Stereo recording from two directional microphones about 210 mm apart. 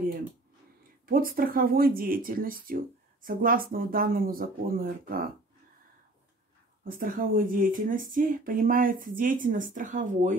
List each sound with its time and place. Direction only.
1.0 s speech: 45° right (ahead or behind)
6.8 s speech: 40° right (ahead or behind)